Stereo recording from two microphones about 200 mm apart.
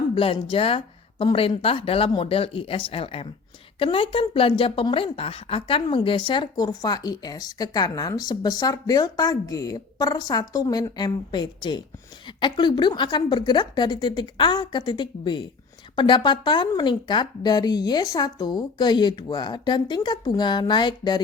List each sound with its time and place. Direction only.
0.1 s a woman's voice: 25° left (ahead or behind)